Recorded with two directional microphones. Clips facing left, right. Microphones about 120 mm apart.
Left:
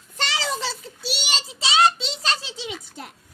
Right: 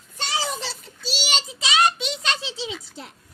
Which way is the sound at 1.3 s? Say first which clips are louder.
Left 1 dB; 30° left (ahead or behind).